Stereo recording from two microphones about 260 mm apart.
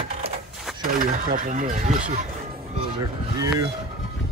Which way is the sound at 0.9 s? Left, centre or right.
Right.